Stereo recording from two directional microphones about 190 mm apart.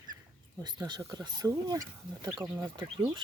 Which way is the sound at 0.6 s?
20° right (ahead or behind).